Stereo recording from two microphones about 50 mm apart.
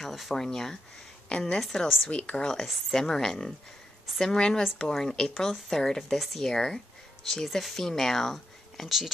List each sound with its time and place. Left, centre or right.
0.0 s speech: centre
1.6 s a woman's voice: centre
2.0 s speech: left
2.4 s speech: centre
6.5 s speech: centre